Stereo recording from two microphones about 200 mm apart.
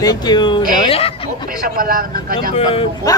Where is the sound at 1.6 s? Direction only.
45° right (ahead or behind).